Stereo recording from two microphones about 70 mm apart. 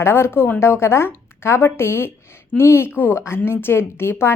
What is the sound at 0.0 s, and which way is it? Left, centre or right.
A woman's voice, left.